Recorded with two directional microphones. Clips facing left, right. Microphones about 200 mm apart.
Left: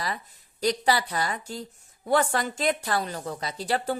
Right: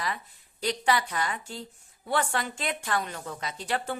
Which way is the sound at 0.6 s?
40° left (ahead or behind).